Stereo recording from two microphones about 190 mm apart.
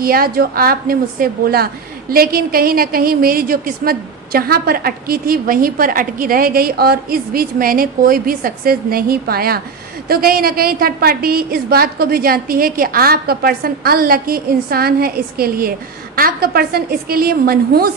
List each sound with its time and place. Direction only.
0.0 s a woman's voice: 50° right (ahead or behind)